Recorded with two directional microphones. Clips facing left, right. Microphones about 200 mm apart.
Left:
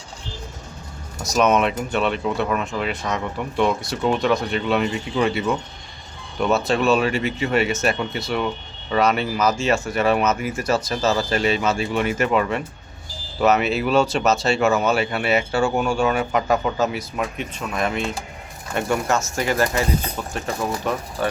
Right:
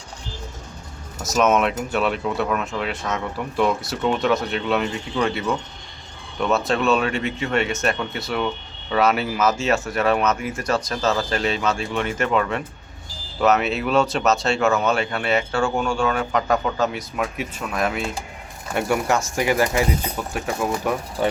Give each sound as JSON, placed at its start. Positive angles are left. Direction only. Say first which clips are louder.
{"t": 1.2, "sound": "speech", "louder": "even", "side_deg": 0}